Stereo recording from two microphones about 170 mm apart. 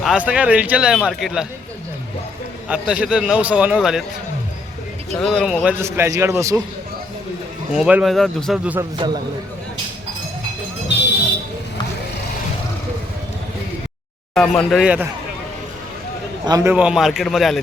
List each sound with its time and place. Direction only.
0.0 s speech: 5° right (ahead or behind)
2.6 s speech: 5° right (ahead or behind)
5.1 s speech: 5° left (ahead or behind)
5.8 s a man's voice: 15° right (ahead or behind)
7.7 s speech: 5° right (ahead or behind)
8.8 s a man's voice: 25° right (ahead or behind)
14.3 s speech: 5° left (ahead or behind)
16.5 s a man's voice: 20° right (ahead or behind)
16.7 s speech: 5° right (ahead or behind)